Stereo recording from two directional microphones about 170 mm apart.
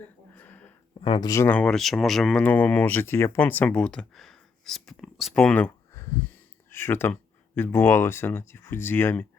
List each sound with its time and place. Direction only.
0.3 s a sound: 10° left (ahead or behind)
1.0 s speech: 30° left (ahead or behind)
1.3 s speech: 15° left (ahead or behind)